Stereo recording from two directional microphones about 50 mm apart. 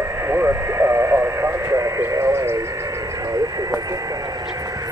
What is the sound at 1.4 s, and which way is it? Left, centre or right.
Vehicle, right.